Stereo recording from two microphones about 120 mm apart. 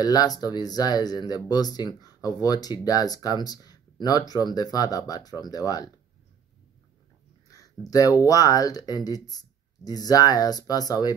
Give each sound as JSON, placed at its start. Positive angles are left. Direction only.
{"t": 0.0, "sound": "speech", "side_deg": 35}
{"t": 7.9, "sound": "speech", "side_deg": 30}